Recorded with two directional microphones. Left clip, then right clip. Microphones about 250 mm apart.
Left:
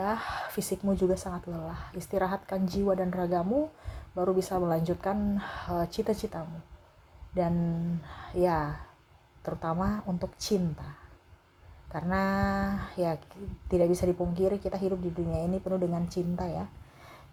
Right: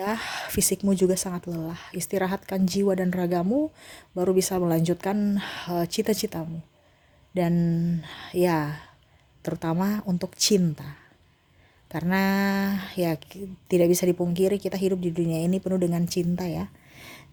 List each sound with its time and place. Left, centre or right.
0.0 s speech: right
8.0 s speech: right
11.9 s speech: right